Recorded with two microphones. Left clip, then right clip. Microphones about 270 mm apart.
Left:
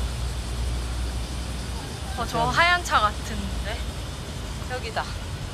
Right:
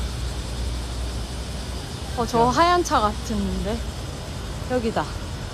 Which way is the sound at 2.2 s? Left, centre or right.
Centre.